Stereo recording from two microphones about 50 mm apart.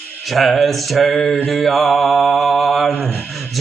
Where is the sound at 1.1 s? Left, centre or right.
Left.